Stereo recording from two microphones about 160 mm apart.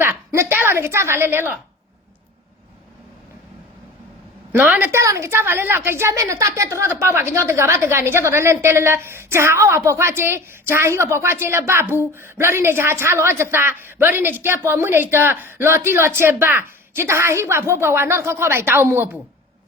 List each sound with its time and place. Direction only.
0.0 s a woman's voice: 15° right (ahead or behind)
4.5 s a woman's voice: 10° right (ahead or behind)